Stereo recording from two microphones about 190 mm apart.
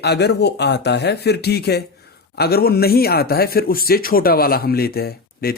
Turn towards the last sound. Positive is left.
turn(degrees=55)  # may be behind; listen again after turning